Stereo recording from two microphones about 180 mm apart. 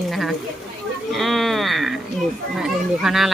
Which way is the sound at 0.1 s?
Centre (ahead or behind).